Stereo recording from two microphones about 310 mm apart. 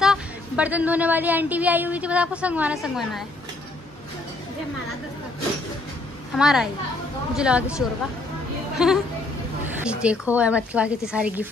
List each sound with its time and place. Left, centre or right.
0.0 s a woman's voice: centre
6.3 s a woman's voice: centre
8.7 s a woman's voice: centre